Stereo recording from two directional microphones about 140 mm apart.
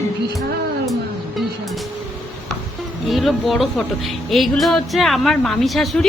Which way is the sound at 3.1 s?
Centre (ahead or behind).